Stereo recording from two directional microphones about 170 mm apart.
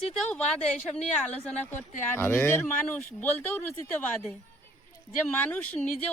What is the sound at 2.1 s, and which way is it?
Speech, 10° left (ahead or behind).